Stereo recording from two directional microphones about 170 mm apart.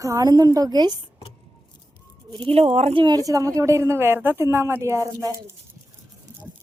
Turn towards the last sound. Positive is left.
turn(degrees=-15)  # may be behind; listen again after turning